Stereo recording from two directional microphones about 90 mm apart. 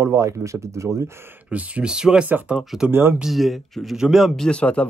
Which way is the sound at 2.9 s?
25° right (ahead or behind).